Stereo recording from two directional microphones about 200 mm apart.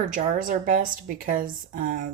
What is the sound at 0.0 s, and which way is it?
A woman's voice, 40° right (ahead or behind).